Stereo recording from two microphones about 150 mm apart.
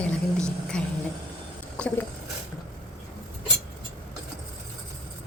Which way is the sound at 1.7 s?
5° left (ahead or behind).